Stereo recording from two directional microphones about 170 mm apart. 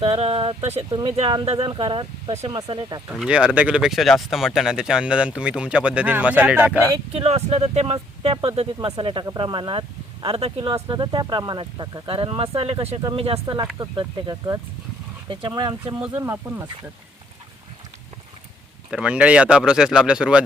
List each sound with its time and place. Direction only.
0.0 s speech: 35° right (ahead or behind)
3.2 s speech: 5° right (ahead or behind)
7.1 s speech: 35° right (ahead or behind)
16.0 s speech: 10° right (ahead or behind)
18.9 s speech: 5° right (ahead or behind)